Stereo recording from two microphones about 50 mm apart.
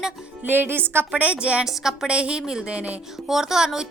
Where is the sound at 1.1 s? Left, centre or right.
Right.